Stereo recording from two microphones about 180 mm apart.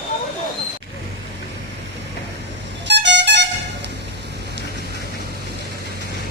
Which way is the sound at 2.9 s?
75° right (ahead or behind).